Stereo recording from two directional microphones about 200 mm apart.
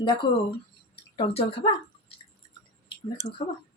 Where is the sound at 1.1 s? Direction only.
30° left (ahead or behind).